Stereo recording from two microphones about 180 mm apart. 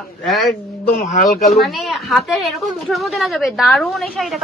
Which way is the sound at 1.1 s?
40° left (ahead or behind).